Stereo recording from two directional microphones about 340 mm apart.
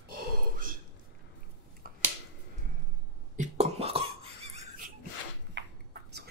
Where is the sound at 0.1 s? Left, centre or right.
Right.